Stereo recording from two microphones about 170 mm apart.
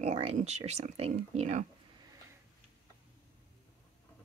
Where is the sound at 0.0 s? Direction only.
40° right (ahead or behind).